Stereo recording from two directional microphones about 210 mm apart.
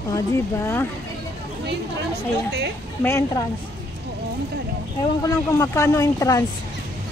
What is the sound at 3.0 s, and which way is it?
Speech, 10° left (ahead or behind).